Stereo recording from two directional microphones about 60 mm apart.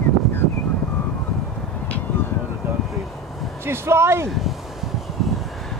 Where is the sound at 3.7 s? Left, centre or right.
Right.